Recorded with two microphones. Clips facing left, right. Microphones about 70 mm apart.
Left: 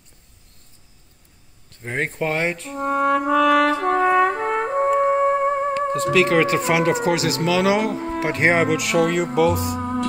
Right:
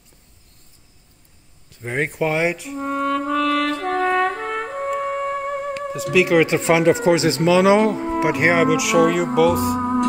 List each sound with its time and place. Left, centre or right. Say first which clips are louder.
1.8 s speech: right 2 dB; centre
2.8 s music: left 3 dB; centre; by 5.8 s left
6.1 s speech: right 2 dB; centre
6.7 s speech: right 3 dB; right
8.0 s speech: right 4 dB; centre
8.4 s speech: even; centre
9.8 s music: right 4 dB; centre